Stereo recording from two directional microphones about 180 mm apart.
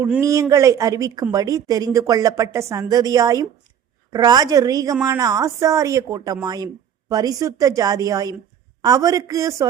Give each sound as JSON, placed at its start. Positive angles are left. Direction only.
{"t": 0.2, "sound": "speech", "side_deg": -20}